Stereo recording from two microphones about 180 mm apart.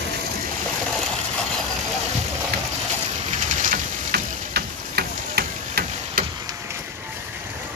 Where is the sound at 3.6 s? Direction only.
50° right (ahead or behind).